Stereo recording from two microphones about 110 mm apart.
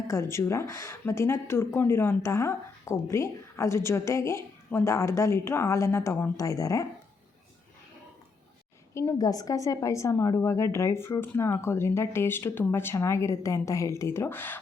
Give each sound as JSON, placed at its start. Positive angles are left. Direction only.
{"t": 0.1, "sound": "speech", "side_deg": 25}
{"t": 9.1, "sound": "speech", "side_deg": 35}